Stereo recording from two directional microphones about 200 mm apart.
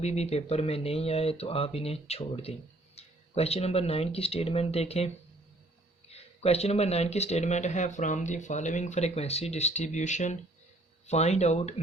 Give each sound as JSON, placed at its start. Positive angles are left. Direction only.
{"t": 0.0, "sound": "speech", "side_deg": 30}